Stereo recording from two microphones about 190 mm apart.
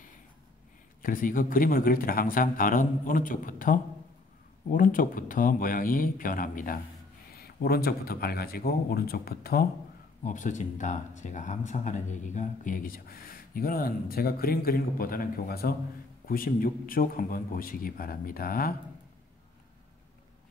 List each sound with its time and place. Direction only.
1.0 s speech: 45° left (ahead or behind)
10.2 s speech: 40° left (ahead or behind)